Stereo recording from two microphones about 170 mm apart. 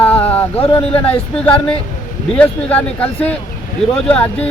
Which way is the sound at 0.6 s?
35° left (ahead or behind).